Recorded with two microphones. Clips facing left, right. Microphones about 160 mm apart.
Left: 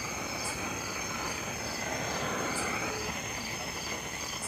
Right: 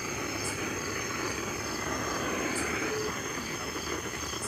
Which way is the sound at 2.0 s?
25° left (ahead or behind).